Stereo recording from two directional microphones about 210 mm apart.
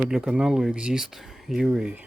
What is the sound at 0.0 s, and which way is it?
Speech, 5° right (ahead or behind).